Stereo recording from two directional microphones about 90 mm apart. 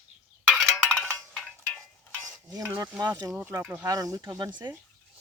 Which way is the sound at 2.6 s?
30° right (ahead or behind).